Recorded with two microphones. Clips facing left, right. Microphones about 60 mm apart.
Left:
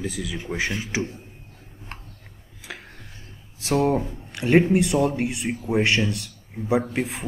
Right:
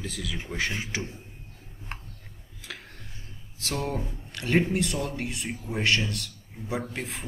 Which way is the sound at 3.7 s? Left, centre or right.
Left.